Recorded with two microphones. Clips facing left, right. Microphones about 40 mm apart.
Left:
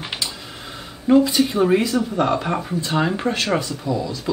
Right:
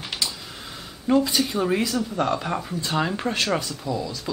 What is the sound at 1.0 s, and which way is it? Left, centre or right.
Speech, centre.